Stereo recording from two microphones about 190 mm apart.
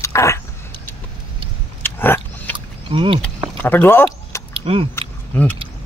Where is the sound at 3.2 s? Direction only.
10° left (ahead or behind).